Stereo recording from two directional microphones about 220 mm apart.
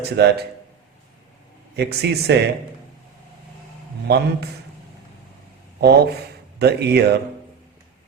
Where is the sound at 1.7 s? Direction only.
50° right (ahead or behind).